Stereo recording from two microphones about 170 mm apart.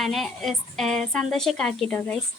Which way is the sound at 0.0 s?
Centre (ahead or behind).